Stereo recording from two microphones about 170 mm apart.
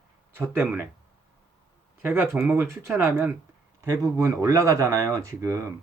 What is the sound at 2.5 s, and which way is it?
Speech, 15° right (ahead or behind).